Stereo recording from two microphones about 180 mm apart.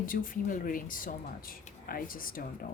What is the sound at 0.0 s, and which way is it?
Speech, 50° left (ahead or behind).